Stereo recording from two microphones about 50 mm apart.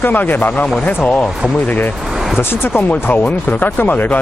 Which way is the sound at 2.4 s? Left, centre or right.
Left.